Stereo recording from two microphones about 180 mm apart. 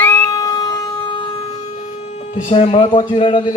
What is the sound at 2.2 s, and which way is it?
Speech, 35° left (ahead or behind).